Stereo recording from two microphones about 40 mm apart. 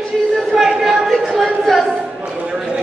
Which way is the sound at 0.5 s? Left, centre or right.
Centre.